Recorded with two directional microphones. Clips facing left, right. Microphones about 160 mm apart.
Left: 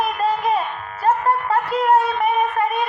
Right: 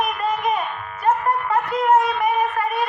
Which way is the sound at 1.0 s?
30° left (ahead or behind).